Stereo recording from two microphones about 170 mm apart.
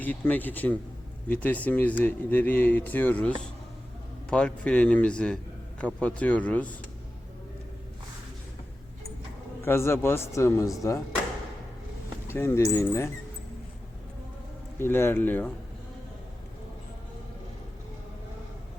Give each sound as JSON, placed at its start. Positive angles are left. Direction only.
{"t": 0.0, "sound": "speech", "side_deg": 10}
{"t": 9.6, "sound": "speech", "side_deg": 15}
{"t": 12.3, "sound": "speech", "side_deg": 15}
{"t": 14.8, "sound": "speech", "side_deg": 15}